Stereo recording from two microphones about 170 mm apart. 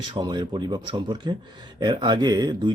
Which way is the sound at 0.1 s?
25° right (ahead or behind).